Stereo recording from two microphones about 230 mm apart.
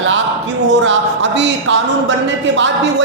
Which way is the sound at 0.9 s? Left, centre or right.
Right.